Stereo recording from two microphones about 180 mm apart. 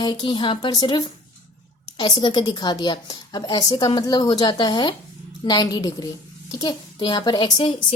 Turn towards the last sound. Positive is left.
turn(degrees=30)  # may be behind; listen again after turning